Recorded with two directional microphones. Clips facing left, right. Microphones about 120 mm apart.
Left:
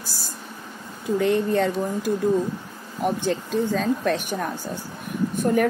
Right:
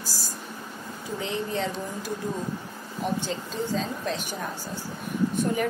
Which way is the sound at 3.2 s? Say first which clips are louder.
Left 7 dB; 60° left (ahead or behind).